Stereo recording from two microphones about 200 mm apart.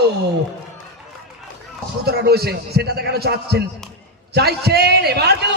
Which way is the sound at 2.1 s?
55° right (ahead or behind).